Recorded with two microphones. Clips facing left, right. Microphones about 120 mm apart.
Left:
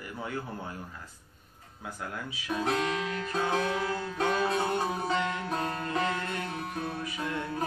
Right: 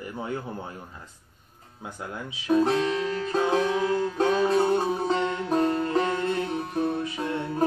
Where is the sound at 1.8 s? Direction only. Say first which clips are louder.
Right 2 dB; 20° right (ahead or behind).